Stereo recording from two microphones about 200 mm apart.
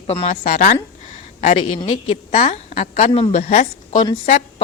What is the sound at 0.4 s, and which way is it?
Speech, 45° left (ahead or behind).